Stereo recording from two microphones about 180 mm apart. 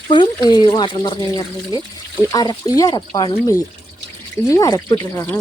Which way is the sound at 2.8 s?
20° left (ahead or behind).